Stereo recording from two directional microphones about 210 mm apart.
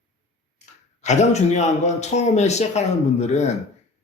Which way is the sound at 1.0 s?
35° left (ahead or behind).